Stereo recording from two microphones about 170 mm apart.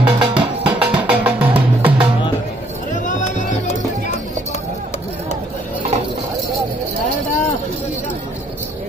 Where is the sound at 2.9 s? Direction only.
45° left (ahead or behind).